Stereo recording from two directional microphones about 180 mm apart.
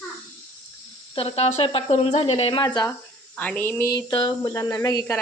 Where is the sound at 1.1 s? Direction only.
30° left (ahead or behind).